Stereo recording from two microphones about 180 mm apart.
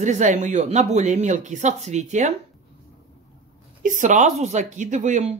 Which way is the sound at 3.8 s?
45° right (ahead or behind).